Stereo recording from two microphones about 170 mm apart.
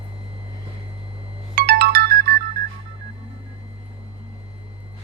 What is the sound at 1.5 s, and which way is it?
Ringtone, 65° right (ahead or behind).